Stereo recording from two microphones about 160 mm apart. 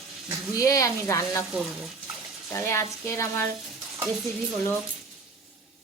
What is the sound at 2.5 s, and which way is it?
Speech, 15° left (ahead or behind).